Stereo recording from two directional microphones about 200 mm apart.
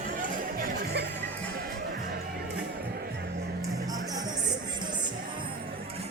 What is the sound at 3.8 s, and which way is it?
Music, 20° right (ahead or behind).